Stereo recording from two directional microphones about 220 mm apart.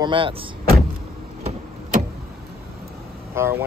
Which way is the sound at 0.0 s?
25° right (ahead or behind).